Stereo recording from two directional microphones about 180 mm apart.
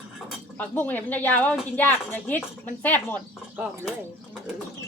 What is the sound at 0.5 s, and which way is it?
Speech, 10° left (ahead or behind).